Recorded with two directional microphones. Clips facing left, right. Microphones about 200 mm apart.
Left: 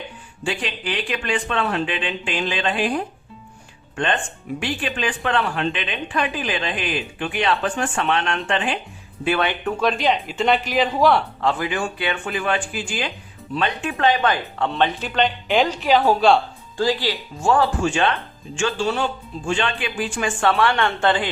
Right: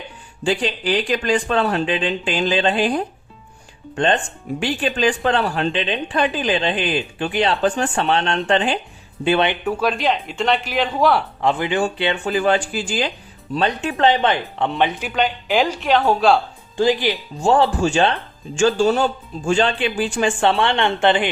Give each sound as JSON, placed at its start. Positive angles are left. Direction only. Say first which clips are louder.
{"t": 0.4, "sound": "a woman's voice", "louder": "right 6 dB", "side_deg": -35}
{"t": 9.6, "sound": "speech", "louder": "right 1 dB", "side_deg": -5}
{"t": 11.3, "sound": "speech", "louder": "right 3 dB", "side_deg": -20}
{"t": 16.7, "sound": "speech", "louder": "right 4 dB", "side_deg": -20}
{"t": 17.4, "sound": "a woman's voice", "louder": "right 3 dB", "side_deg": -30}